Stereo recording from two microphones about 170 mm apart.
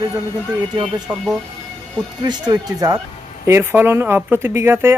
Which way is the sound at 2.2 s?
25° right (ahead or behind).